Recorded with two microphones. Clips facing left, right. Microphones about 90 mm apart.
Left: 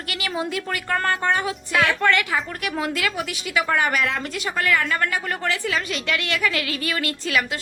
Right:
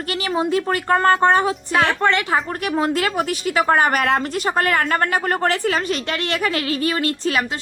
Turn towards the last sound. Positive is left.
turn(degrees=-35)  # may be behind; listen again after turning